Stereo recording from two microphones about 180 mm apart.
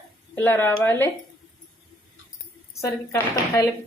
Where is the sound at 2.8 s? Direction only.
15° left (ahead or behind).